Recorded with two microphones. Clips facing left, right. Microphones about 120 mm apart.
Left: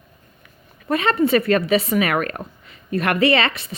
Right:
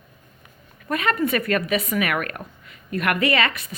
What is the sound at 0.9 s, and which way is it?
A woman's voice, 30° left (ahead or behind).